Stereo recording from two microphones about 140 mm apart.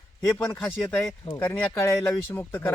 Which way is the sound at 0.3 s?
15° left (ahead or behind).